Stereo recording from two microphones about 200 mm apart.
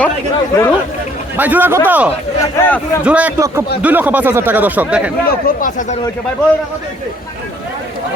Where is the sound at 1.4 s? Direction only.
10° right (ahead or behind).